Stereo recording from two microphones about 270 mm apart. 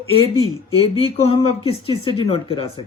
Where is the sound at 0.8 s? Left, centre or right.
Left.